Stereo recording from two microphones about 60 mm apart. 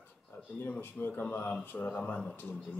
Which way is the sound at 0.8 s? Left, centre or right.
Left.